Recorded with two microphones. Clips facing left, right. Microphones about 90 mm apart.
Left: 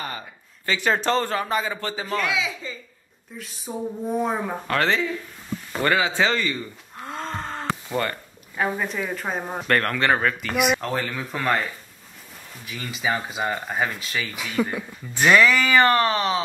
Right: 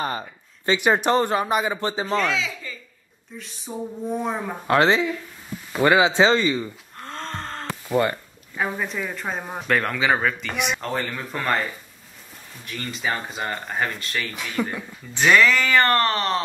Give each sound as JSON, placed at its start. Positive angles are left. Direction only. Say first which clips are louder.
{"t": 0.7, "sound": "a man's voice", "louder": "right 3 dB", "side_deg": -15}
{"t": 2.1, "sound": "speech", "louder": "left 1 dB", "side_deg": 10}
{"t": 3.3, "sound": "a man's voice", "louder": "left 1 dB", "side_deg": 5}
{"t": 4.6, "sound": "a man's voice", "louder": "right 5 dB", "side_deg": -20}
{"t": 7.0, "sound": "wheeze", "louder": "left 2 dB", "side_deg": 5}
{"t": 7.9, "sound": "a man's voice", "louder": "right 7 dB", "side_deg": -15}
{"t": 8.5, "sound": "a man's voice", "louder": "left 1 dB", "side_deg": 0}